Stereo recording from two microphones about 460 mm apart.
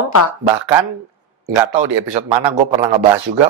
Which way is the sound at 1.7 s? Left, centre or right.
Right.